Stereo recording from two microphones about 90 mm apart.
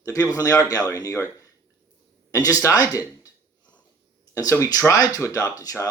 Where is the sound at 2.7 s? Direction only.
40° left (ahead or behind).